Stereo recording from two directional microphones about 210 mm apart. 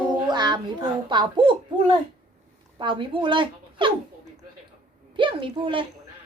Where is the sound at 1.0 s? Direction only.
20° right (ahead or behind).